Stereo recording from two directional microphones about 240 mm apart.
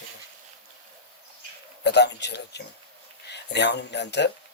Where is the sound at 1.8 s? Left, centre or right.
Left.